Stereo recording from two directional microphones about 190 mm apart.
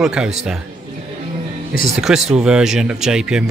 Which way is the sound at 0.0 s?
5° right (ahead or behind).